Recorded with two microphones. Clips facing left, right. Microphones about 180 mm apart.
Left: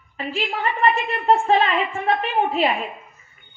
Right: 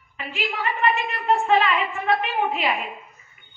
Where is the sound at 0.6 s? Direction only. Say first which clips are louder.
Left 2 dB; 40° left (ahead or behind).